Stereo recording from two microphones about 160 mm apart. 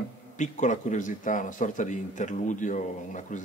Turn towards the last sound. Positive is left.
turn(degrees=50)  # may be behind; listen again after turning